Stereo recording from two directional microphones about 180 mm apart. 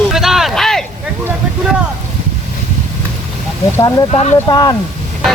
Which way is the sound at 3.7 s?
20° left (ahead or behind).